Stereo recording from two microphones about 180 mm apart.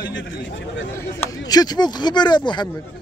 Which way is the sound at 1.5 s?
20° left (ahead or behind).